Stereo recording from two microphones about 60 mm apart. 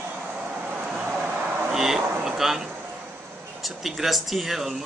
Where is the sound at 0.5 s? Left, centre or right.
Right.